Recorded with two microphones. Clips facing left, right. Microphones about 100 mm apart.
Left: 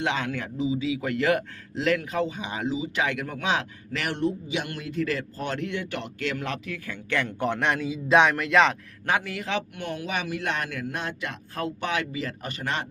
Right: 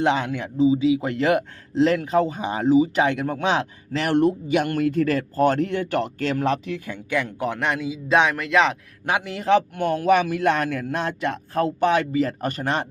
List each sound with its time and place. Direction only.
0.2 s a man's voice: 20° right (ahead or behind)
0.5 s a man's voice: 30° right (ahead or behind)
4.1 s speech: 55° right (ahead or behind); by 6.6 s 35° right (ahead or behind)
6.7 s speech: 20° right (ahead or behind)
7.2 s a man's voice: 5° right (ahead or behind)
9.0 s speech: 15° right (ahead or behind)
9.3 s speech: 35° right (ahead or behind)